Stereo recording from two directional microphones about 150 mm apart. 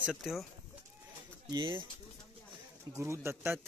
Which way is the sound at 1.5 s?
35° right (ahead or behind).